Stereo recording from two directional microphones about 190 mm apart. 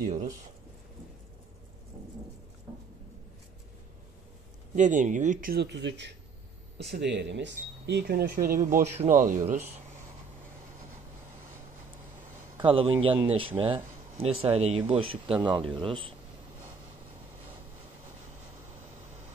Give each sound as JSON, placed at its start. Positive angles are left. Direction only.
{"t": 0.1, "sound": "speech", "side_deg": -40}
{"t": 4.7, "sound": "speech", "side_deg": -40}
{"t": 12.6, "sound": "speech", "side_deg": -25}